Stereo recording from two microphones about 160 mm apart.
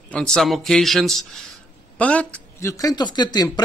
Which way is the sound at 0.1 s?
5° left (ahead or behind).